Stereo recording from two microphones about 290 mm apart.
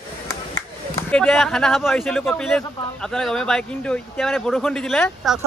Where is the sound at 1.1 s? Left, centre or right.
Centre.